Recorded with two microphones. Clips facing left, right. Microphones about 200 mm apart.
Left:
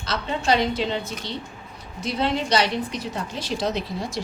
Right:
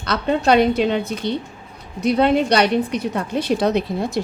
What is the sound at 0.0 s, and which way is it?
A woman's voice, 60° right (ahead or behind).